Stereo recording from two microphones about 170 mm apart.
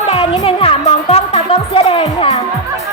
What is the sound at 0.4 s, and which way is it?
Music, 35° left (ahead or behind).